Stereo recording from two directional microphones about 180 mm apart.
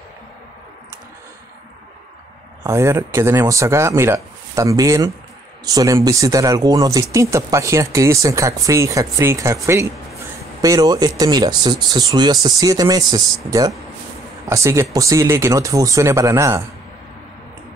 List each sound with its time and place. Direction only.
2.6 s speech: 15° right (ahead or behind)